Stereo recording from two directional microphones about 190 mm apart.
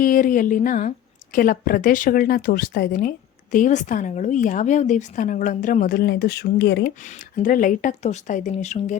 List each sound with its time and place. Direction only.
0.0 s a woman's voice: 45° left (ahead or behind)
7.0 s speech: 40° left (ahead or behind)